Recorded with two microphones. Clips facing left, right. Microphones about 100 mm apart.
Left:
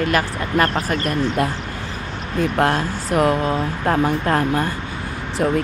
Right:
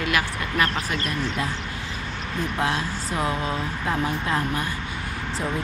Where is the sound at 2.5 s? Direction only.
55° left (ahead or behind).